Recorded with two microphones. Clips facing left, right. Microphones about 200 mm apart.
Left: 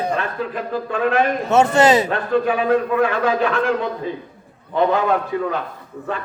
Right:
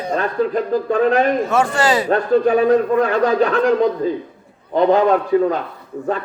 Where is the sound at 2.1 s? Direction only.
40° right (ahead or behind).